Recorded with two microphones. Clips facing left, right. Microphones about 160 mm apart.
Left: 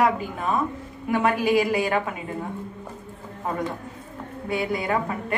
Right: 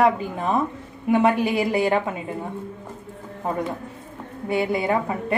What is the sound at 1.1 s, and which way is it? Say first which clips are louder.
Speech: right 2 dB; 25° right (ahead or behind).